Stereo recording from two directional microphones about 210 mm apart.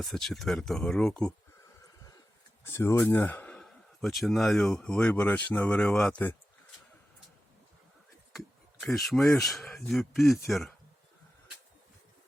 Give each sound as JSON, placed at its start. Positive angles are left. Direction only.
{"t": 0.0, "sound": "speech", "side_deg": 0}
{"t": 1.8, "sound": "horse", "side_deg": 15}
{"t": 2.6, "sound": "speech", "side_deg": 10}
{"t": 8.8, "sound": "speech", "side_deg": 0}